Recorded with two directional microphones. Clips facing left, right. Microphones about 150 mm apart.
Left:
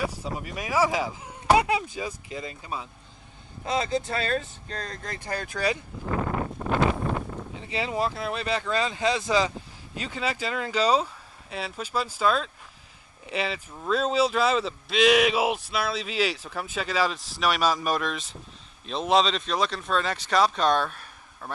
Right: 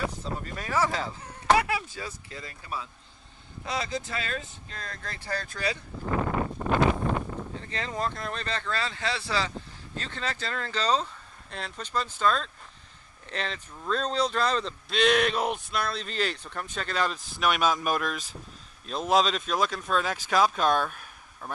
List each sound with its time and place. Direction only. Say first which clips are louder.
0.0 s speech: left 2 dB; 10° left (ahead or behind)
4.1 s speech: left 6 dB; 35° left (ahead or behind)
5.0 s speech: right 1 dB; 15° left (ahead or behind)
7.6 s speech: left 5 dB; 10° left (ahead or behind)